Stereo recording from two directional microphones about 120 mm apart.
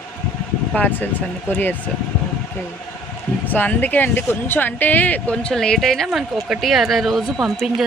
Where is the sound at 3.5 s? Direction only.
15° left (ahead or behind).